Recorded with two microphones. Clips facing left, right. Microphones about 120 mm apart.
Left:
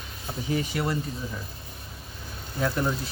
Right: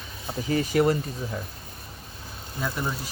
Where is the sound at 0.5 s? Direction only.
50° right (ahead or behind).